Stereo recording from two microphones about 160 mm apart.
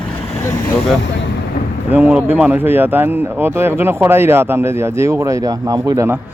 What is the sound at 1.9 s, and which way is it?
Speech, 10° right (ahead or behind).